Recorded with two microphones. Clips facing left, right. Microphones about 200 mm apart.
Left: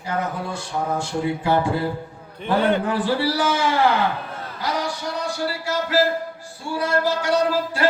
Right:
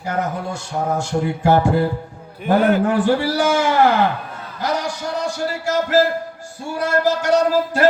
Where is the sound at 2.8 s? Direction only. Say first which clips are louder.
Right 4 dB; 50° right (ahead or behind).